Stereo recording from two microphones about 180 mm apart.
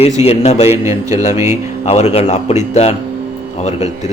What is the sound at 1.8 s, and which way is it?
A man's voice, 35° left (ahead or behind).